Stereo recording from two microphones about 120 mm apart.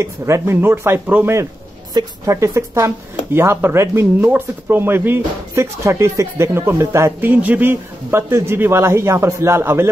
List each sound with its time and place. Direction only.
0.0 s speech: 25° right (ahead or behind)
2.0 s speech: 25° right (ahead or behind)